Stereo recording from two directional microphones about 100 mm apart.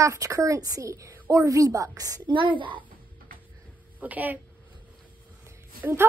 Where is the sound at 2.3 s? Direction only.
55° right (ahead or behind).